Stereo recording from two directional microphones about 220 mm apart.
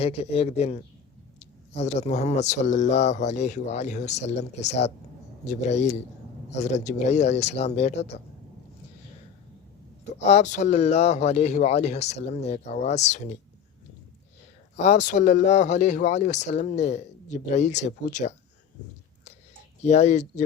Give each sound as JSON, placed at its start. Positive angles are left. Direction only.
{"t": 0.0, "sound": "a man's voice", "side_deg": 25}
{"t": 10.2, "sound": "speech", "side_deg": 30}
{"t": 14.8, "sound": "speech", "side_deg": 35}
{"t": 19.8, "sound": "speech", "side_deg": 30}